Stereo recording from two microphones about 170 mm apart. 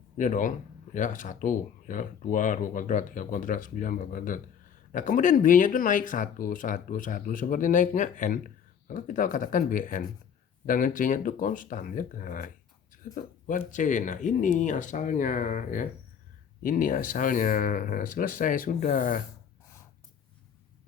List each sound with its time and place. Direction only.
0.2 s speech: 50° left (ahead or behind)